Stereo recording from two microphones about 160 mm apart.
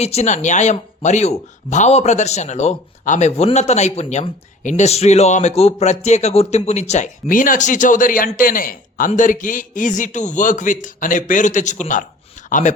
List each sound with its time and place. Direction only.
0.0 s speech: 45° left (ahead or behind)